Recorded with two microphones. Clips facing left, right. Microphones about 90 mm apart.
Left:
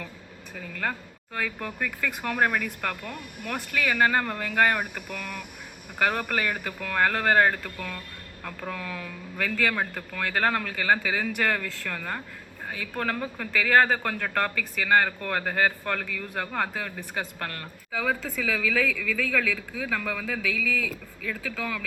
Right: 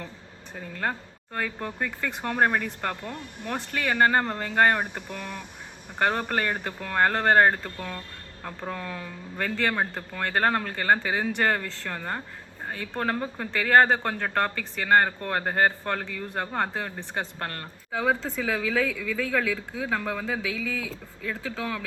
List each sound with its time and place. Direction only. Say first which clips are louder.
0.5 s speech: right 1 dB; 30° right (ahead or behind)
14.8 s speech: right 2 dB; 40° right (ahead or behind)
15.8 s speech: right 1 dB; 25° right (ahead or behind)